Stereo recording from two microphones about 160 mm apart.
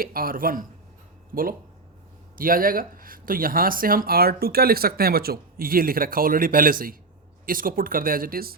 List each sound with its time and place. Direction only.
0.0 s speech: 65° right (ahead or behind)